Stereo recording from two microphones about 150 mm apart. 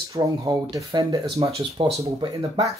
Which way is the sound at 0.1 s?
25° right (ahead or behind).